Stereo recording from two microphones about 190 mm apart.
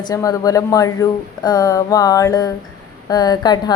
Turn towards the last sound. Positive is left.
turn(degrees=20)  # may be behind; listen again after turning